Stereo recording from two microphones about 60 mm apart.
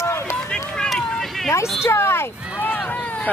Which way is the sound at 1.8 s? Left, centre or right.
Left.